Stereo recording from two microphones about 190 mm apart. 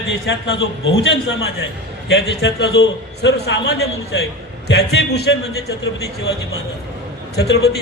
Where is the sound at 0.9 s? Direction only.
75° left (ahead or behind); by 5.6 s 60° left (ahead or behind).